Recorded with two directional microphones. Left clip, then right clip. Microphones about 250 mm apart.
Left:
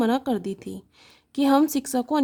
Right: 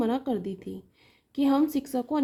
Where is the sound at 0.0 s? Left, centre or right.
Left.